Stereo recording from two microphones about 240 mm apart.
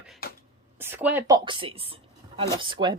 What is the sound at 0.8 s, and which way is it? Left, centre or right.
Speech, centre.